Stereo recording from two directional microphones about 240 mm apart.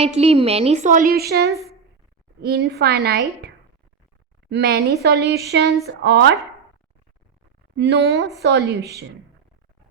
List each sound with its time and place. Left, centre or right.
0.0 s a woman's voice: right
7.8 s a woman's voice: right